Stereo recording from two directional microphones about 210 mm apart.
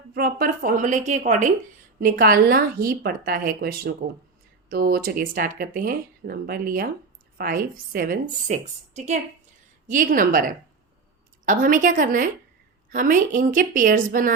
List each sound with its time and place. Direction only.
0.1 s a woman's voice: 45° right (ahead or behind)